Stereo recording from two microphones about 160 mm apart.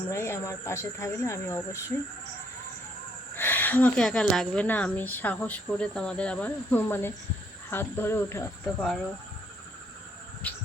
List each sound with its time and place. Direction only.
0.1 s a woman's voice: 15° left (ahead or behind)
3.3 s a woman's voice: 10° left (ahead or behind)
8.6 s speech: centre (ahead or behind)
10.4 s a woman's voice: 10° left (ahead or behind)